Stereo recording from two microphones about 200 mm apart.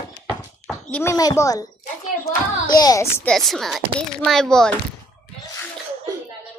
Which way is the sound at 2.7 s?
20° left (ahead or behind).